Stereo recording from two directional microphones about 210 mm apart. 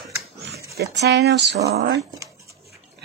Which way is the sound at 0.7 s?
55° right (ahead or behind).